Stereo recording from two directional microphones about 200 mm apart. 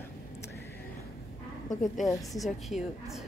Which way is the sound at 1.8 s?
Centre (ahead or behind).